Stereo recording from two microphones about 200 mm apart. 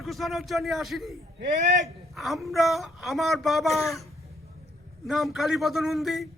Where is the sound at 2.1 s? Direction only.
Centre (ahead or behind).